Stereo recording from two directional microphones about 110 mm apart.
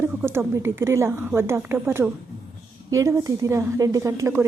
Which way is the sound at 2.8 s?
30° right (ahead or behind).